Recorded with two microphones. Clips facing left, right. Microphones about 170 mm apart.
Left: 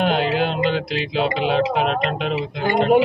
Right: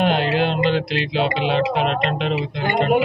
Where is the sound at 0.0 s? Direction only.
Centre (ahead or behind).